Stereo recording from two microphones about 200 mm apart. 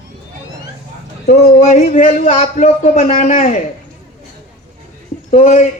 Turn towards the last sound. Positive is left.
turn(degrees=40)  # may be behind; listen again after turning